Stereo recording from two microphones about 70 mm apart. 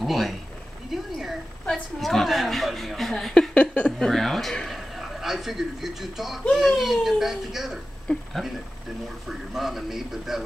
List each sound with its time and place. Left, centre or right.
0.0 s a woman's voice: centre
3.5 s speech: centre
4.0 s a man's voice: centre